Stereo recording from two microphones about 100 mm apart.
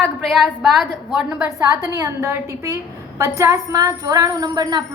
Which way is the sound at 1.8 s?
30° right (ahead or behind).